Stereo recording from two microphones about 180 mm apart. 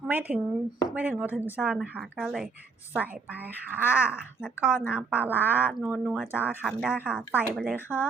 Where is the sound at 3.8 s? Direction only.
10° right (ahead or behind).